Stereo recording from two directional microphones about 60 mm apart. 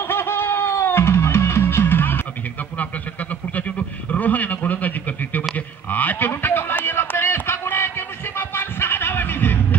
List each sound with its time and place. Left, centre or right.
0.0 s music: left
3.5 s a sound: left
8.4 s music: left